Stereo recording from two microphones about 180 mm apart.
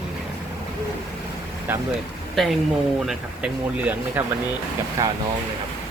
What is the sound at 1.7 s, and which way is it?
Speech, 10° right (ahead or behind).